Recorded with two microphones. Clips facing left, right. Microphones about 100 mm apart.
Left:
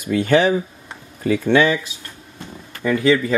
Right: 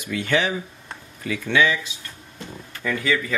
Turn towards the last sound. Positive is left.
turn(degrees=20)  # may be behind; listen again after turning